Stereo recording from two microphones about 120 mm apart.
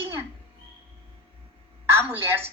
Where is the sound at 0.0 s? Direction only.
20° right (ahead or behind).